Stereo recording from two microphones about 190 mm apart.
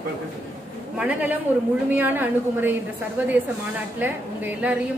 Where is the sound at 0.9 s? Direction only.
5° right (ahead or behind).